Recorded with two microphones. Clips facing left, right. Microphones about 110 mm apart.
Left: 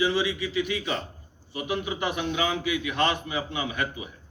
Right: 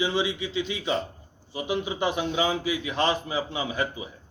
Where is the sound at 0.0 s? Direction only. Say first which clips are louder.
Left 1 dB; 25° right (ahead or behind).